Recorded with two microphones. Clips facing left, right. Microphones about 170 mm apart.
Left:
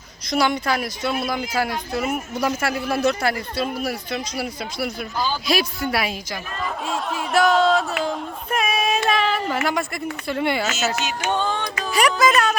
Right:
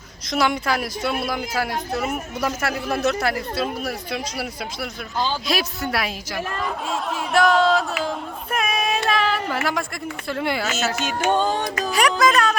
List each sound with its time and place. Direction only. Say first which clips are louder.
0.3 s speech: left 1 dB; centre (ahead or behind)
5.1 s speech: right 2 dB; 20° right (ahead or behind)
5.5 s speech: left 2 dB; centre (ahead or behind)
6.8 s a sound: even; centre (ahead or behind)
10.9 s music: right 3 dB; 50° right (ahead or behind)
11.9 s speech: left 1 dB; centre (ahead or behind)